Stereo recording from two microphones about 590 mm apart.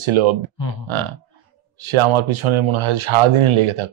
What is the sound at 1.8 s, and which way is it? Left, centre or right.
Speech, right.